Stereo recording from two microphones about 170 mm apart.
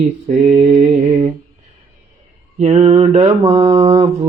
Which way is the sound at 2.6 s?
40° right (ahead or behind).